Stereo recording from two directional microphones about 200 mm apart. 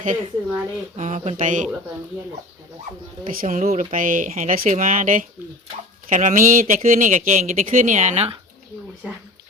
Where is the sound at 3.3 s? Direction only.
45° right (ahead or behind).